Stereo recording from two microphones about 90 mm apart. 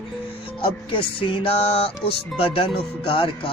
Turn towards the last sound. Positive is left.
turn(degrees=75)  # may be behind; listen again after turning